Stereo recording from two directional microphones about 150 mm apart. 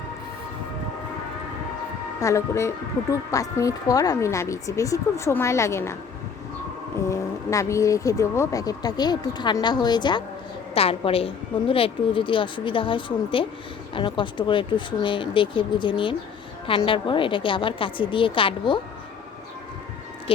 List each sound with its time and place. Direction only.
2.2 s a woman's voice: 20° left (ahead or behind)
7.1 s a woman's voice: 20° left (ahead or behind)